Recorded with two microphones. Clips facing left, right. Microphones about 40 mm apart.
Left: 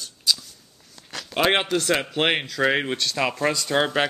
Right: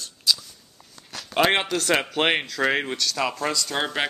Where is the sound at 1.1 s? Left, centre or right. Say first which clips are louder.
Even; centre.